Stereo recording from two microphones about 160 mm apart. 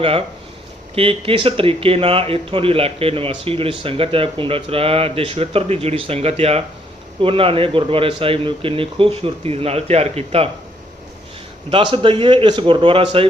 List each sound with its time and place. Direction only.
0.0 s speech: 35° right (ahead or behind)
11.7 s speech: 30° right (ahead or behind)